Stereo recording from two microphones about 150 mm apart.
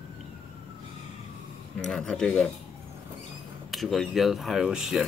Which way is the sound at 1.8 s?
5° left (ahead or behind).